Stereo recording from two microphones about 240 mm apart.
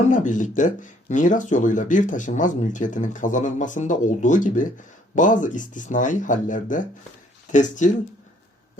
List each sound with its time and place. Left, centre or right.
0.1 s speech: left